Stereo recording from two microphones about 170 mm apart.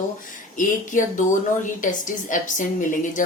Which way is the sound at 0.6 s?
50° left (ahead or behind).